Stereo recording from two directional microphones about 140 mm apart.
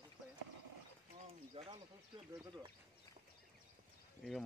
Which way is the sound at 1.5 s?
40° right (ahead or behind).